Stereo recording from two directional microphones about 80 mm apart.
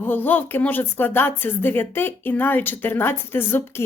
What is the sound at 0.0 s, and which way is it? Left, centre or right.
Speech, left.